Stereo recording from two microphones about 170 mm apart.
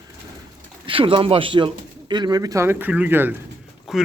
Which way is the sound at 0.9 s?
30° right (ahead or behind).